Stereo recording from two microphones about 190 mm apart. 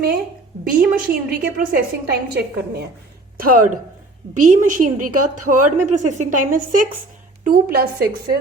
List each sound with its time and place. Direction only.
0.6 s a woman's voice: 50° right (ahead or behind)
3.3 s a woman's voice: 45° right (ahead or behind)